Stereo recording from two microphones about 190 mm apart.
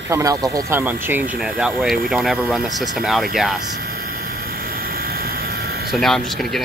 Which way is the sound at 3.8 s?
55° right (ahead or behind).